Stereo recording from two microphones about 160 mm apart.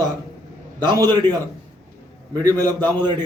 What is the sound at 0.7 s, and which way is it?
Speech, 30° right (ahead or behind).